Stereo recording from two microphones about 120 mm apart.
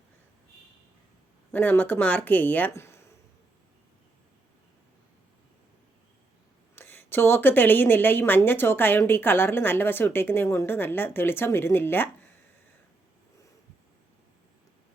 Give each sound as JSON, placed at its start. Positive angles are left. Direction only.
{"t": 1.5, "sound": "speech", "side_deg": 15}
{"t": 6.7, "sound": "a woman's voice", "side_deg": 20}